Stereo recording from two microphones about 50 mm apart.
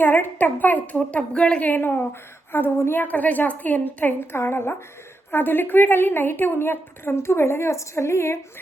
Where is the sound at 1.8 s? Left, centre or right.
Left.